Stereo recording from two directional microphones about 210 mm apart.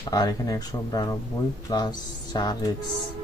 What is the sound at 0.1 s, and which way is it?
Speech, 15° left (ahead or behind).